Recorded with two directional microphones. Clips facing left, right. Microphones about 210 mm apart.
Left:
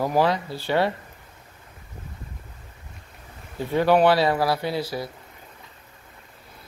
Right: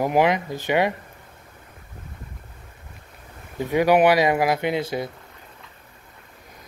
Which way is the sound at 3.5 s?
15° right (ahead or behind).